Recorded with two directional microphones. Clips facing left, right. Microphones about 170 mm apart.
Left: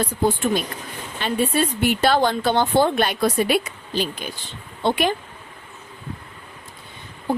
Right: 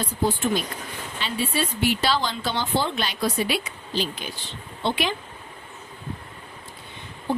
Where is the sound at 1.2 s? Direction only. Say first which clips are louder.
Left 6 dB; 50° left (ahead or behind).